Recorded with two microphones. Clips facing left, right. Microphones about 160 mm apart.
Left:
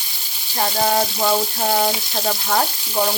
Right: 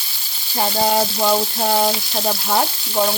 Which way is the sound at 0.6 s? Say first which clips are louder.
Right 1 dB; 15° right (ahead or behind).